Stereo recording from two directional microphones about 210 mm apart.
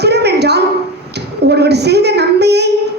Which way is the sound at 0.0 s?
50° right (ahead or behind).